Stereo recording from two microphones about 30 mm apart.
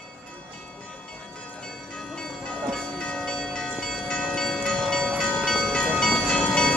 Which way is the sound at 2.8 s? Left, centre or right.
Left.